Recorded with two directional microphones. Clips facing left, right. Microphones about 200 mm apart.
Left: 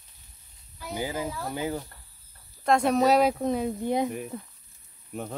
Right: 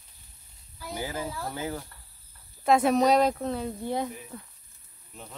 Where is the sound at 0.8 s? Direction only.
15° left (ahead or behind).